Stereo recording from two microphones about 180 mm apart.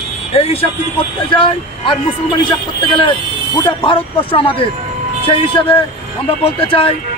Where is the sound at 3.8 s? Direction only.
30° left (ahead or behind).